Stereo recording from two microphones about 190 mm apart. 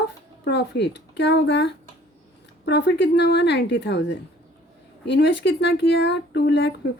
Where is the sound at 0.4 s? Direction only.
65° left (ahead or behind).